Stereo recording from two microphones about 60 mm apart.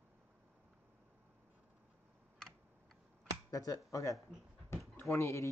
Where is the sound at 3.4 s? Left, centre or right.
Left.